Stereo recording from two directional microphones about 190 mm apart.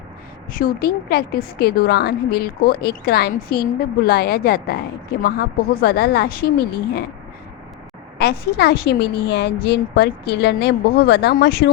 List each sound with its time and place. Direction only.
0.5 s a woman's voice: 50° left (ahead or behind)
8.2 s a woman's voice: 60° left (ahead or behind)